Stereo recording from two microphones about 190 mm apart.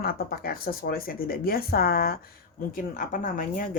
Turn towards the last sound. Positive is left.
turn(degrees=45)  # may be behind; listen again after turning